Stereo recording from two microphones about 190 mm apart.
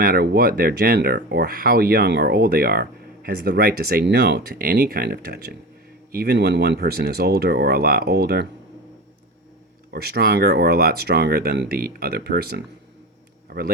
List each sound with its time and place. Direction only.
0.0 s speech: 55° right (ahead or behind)
9.9 s speech: 55° right (ahead or behind)